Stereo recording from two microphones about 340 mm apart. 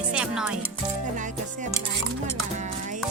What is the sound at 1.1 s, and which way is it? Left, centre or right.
Music, right.